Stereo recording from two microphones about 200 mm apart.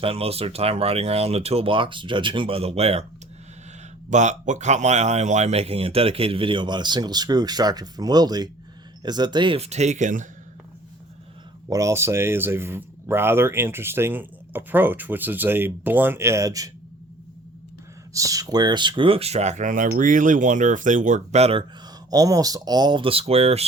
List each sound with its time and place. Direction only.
0.0 s a man's voice: 30° right (ahead or behind)
4.1 s a man's voice: 35° right (ahead or behind)
11.7 s speech: 15° right (ahead or behind)
18.1 s a man's voice: 15° right (ahead or behind)
22.1 s a man's voice: 20° right (ahead or behind)